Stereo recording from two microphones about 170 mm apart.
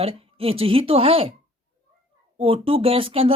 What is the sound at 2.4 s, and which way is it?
Speech, 30° right (ahead or behind).